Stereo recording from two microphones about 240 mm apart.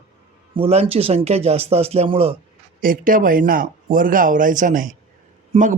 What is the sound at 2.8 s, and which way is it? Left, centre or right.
Speech, right.